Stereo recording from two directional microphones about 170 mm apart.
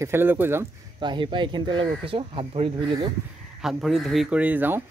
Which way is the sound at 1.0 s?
25° right (ahead or behind).